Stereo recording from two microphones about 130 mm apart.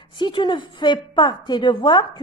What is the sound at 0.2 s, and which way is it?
A woman's voice, 35° left (ahead or behind).